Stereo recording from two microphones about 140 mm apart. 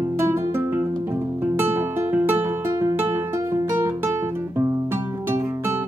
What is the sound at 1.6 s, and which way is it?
Music, 15° right (ahead or behind).